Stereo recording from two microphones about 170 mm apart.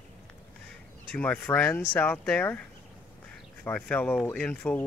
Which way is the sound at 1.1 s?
10° left (ahead or behind).